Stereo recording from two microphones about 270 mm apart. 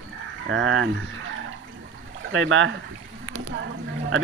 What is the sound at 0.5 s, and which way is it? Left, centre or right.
Speech, right.